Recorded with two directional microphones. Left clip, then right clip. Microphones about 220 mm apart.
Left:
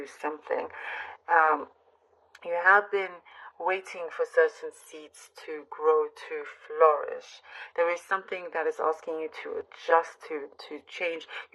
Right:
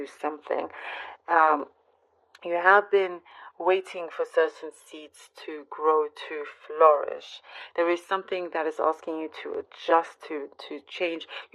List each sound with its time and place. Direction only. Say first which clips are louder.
0.0 s speech: right 2 dB; 50° right (ahead or behind)